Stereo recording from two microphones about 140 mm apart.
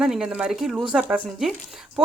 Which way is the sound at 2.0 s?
5° right (ahead or behind).